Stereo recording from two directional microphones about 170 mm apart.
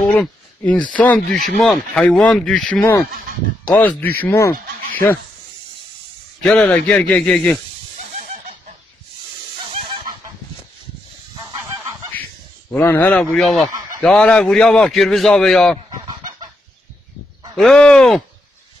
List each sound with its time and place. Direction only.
0.1 s speech: 10° left (ahead or behind)
6.4 s a man's voice: 5° left (ahead or behind)
8.2 s chicken: 45° right (ahead or behind)
9.7 s fowl: 30° right (ahead or behind)
12.7 s a man's voice: 10° left (ahead or behind)
17.6 s a man's voice: 5° left (ahead or behind)